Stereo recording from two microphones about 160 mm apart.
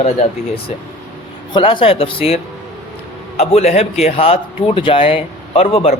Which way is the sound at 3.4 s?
40° left (ahead or behind).